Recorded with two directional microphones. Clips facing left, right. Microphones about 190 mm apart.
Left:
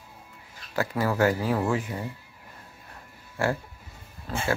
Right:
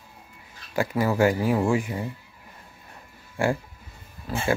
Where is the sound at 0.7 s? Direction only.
15° right (ahead or behind).